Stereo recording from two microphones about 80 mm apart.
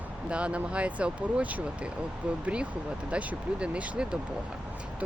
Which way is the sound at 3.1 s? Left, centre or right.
Centre.